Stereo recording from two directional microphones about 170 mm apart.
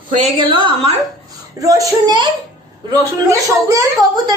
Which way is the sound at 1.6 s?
20° right (ahead or behind).